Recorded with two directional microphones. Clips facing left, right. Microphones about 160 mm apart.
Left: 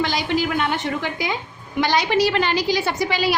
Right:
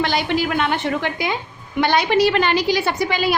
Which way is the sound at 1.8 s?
55° right (ahead or behind).